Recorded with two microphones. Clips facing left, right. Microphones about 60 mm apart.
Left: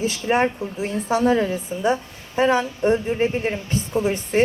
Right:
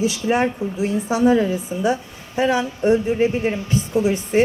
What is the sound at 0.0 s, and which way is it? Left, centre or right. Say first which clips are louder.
Speech: right 1 dB; left.